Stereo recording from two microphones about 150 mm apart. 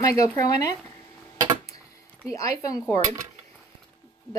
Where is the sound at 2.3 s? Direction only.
20° left (ahead or behind).